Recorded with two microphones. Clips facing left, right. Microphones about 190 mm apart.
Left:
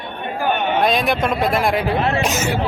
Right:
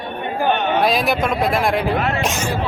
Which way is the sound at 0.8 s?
Centre (ahead or behind).